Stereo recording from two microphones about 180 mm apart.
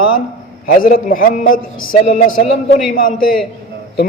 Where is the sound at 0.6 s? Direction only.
50° left (ahead or behind).